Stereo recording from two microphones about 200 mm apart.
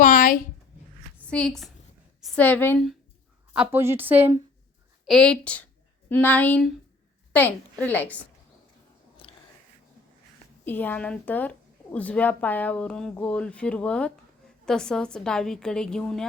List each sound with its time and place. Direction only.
0.0 s a sound: 40° left (ahead or behind)
1.2 s a woman's voice: 5° left (ahead or behind)
3.5 s a woman's voice: 10° right (ahead or behind)
5.0 s a woman's voice: centre (ahead or behind)
9.2 s biting: 25° left (ahead or behind)
10.7 s a woman's voice: 10° left (ahead or behind)